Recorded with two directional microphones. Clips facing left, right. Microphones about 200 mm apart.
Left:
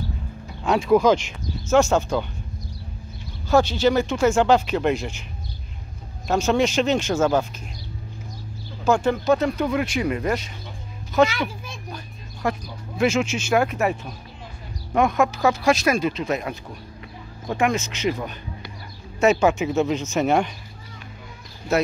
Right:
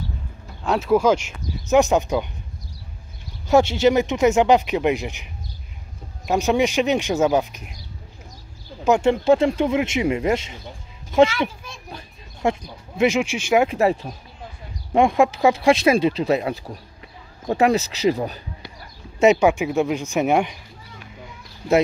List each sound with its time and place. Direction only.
0.7 s speech: 5° right (ahead or behind)
3.4 s speech: 25° right (ahead or behind)
6.2 s speech: 15° right (ahead or behind)
8.8 s speech: 25° right (ahead or behind)
11.9 s a sound: 25° right (ahead or behind)
13.7 s speech: 30° right (ahead or behind)
19.1 s speech: 15° right (ahead or behind)